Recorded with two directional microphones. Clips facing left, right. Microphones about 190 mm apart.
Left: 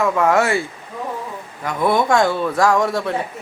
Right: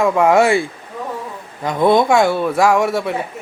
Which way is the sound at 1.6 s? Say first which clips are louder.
Right 5 dB; 20° right (ahead or behind).